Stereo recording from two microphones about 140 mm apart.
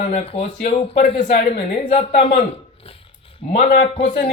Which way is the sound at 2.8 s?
40° left (ahead or behind).